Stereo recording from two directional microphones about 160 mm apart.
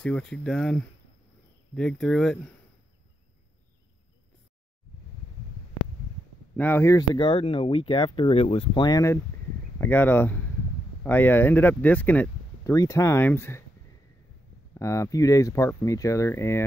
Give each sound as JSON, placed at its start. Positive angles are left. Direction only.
{"t": 0.0, "sound": "speech", "side_deg": 5}
{"t": 6.5, "sound": "speech", "side_deg": 10}
{"t": 14.7, "sound": "speech", "side_deg": 20}